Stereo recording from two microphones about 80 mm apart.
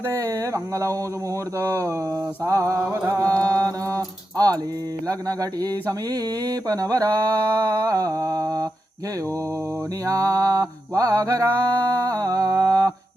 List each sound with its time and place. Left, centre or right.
0.0 s mantra: right
7.4 s mantra: right
10.1 s mantra: right